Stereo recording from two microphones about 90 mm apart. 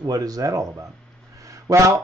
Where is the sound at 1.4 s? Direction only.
40° right (ahead or behind).